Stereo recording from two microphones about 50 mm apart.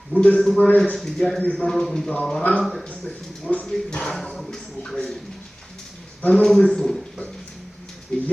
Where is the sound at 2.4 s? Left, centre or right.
Left.